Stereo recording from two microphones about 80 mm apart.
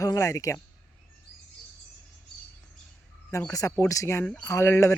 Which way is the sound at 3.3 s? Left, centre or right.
Left.